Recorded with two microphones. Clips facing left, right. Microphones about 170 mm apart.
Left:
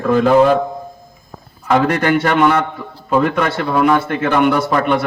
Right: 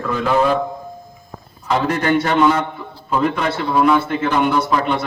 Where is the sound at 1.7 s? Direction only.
65° left (ahead or behind).